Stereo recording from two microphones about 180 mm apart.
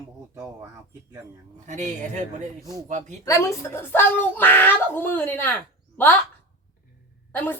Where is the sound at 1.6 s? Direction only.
40° right (ahead or behind).